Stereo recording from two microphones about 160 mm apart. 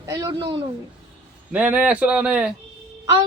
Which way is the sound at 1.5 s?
10° right (ahead or behind).